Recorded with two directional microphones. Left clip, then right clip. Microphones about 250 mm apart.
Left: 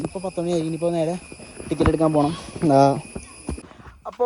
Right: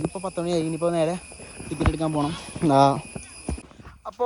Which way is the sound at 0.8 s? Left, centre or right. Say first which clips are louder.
Right 1 dB; right.